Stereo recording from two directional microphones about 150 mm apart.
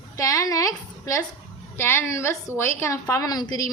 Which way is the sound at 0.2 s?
20° left (ahead or behind).